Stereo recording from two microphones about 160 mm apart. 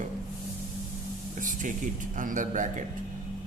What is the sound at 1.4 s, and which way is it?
Speech, 55° right (ahead or behind).